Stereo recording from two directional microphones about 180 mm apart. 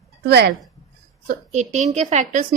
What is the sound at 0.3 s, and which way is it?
Speech, 65° right (ahead or behind).